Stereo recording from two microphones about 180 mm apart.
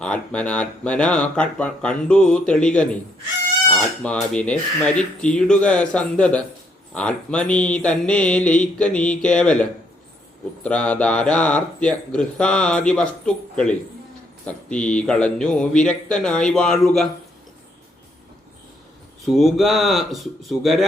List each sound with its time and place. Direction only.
0.0 s speech: 5° left (ahead or behind)
19.2 s speech: centre (ahead or behind)